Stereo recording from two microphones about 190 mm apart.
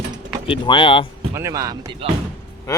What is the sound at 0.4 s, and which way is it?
Speech, 25° left (ahead or behind).